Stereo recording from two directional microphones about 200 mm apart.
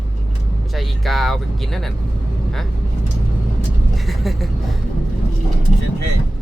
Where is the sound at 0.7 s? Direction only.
Centre (ahead or behind).